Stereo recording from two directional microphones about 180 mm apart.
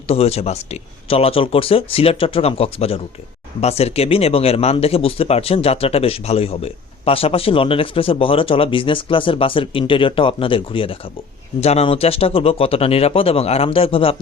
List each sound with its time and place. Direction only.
0.1 s speech: 35° left (ahead or behind)